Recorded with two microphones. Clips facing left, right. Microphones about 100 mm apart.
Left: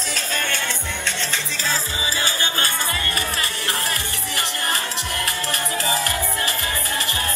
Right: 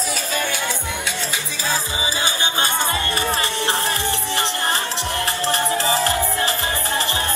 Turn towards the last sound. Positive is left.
turn(degrees=-30)  # may be behind; listen again after turning